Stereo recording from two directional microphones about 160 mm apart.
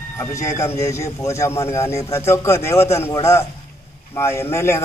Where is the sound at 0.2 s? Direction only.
20° left (ahead or behind).